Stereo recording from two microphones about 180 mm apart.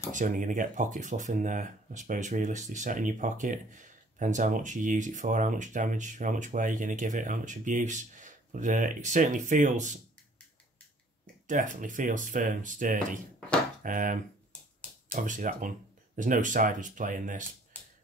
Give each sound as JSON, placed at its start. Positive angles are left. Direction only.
{"t": 0.1, "sound": "speech", "side_deg": -45}
{"t": 11.4, "sound": "speech", "side_deg": -45}